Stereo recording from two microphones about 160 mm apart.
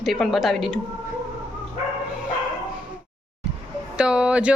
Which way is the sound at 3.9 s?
5° right (ahead or behind).